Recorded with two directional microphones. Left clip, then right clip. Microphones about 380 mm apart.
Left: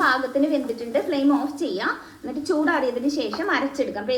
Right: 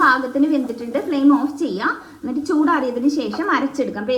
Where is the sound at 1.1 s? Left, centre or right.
Centre.